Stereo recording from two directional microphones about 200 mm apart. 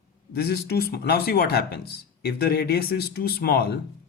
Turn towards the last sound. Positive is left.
turn(degrees=50)  # may be behind; listen again after turning